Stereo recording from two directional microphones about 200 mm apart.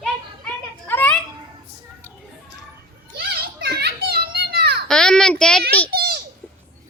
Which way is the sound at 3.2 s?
50° right (ahead or behind).